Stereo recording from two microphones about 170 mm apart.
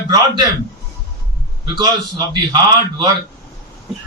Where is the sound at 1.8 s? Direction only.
25° right (ahead or behind).